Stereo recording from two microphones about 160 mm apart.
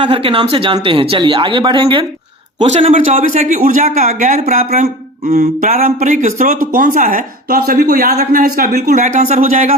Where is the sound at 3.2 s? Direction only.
55° right (ahead or behind).